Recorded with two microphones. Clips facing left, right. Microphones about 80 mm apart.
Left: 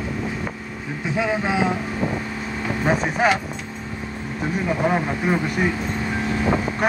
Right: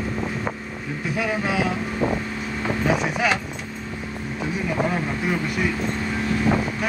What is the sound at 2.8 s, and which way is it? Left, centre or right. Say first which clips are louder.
Speech: left 3 dB; left.